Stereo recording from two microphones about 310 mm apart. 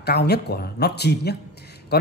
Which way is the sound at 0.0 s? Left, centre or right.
Left.